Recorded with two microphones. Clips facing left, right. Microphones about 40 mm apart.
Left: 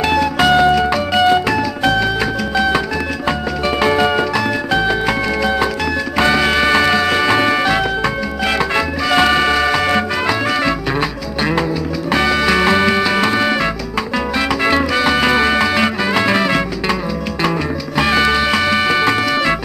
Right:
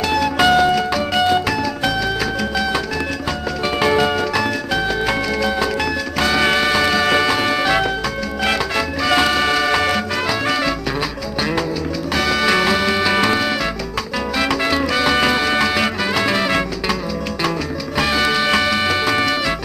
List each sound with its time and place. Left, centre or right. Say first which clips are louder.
0.1 s music: even; centre
3.8 s music: left 2 dB; centre
6.3 s music: even; centre
8.5 s music: left 3 dB; centre
12.1 s music: left 3 dB; centre
13.0 s music: left 2 dB; centre
14.6 s music: left 4 dB; centre
15.0 s music: left 2 dB; centre
17.9 s music: left 3 dB; centre